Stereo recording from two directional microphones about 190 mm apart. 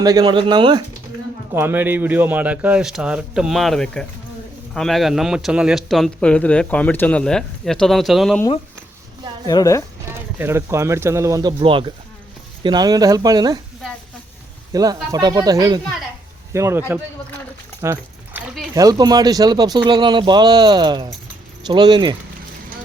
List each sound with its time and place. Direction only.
0.0 s speech: 20° right (ahead or behind)
1.5 s speech: 10° right (ahead or behind)
9.5 s speech: 20° left (ahead or behind)
10.1 s speech: 10° right (ahead or behind)
14.7 s a man's voice: 20° right (ahead or behind)
17.8 s speech: 15° right (ahead or behind)
18.3 s a sound: centre (ahead or behind)
18.7 s speech: 20° right (ahead or behind)